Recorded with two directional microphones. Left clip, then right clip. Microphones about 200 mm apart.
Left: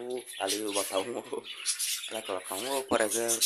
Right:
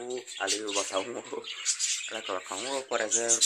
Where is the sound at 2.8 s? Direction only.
25° left (ahead or behind).